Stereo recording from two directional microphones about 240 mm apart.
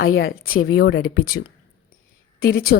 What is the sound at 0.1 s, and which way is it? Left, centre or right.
Speech, left.